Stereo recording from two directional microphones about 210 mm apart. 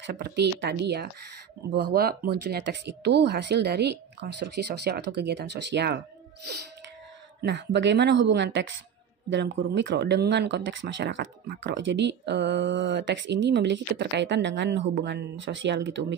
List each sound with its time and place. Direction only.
0.0 s speech: 55° right (ahead or behind)
7.4 s speech: 55° right (ahead or behind)